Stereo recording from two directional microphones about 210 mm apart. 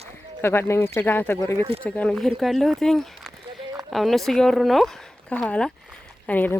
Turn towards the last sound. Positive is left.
turn(degrees=10)  # may be behind; listen again after turning